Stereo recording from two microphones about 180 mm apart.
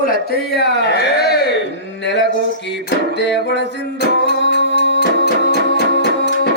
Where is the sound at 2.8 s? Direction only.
70° left (ahead or behind).